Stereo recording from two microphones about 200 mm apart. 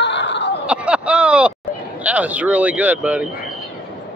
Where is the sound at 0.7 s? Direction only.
5° right (ahead or behind).